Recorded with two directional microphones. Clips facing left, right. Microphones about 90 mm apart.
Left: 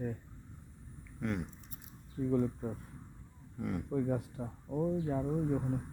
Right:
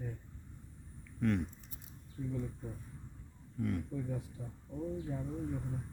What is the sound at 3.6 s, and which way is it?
Speech, 20° left (ahead or behind).